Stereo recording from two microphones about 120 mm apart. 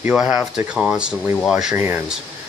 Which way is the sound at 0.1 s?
5° right (ahead or behind).